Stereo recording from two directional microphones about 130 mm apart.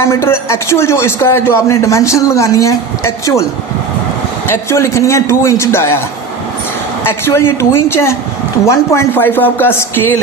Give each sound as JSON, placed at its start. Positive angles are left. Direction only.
{"t": 0.0, "sound": "speech", "side_deg": 20}
{"t": 4.4, "sound": "speech", "side_deg": 20}
{"t": 7.1, "sound": "speech", "side_deg": 20}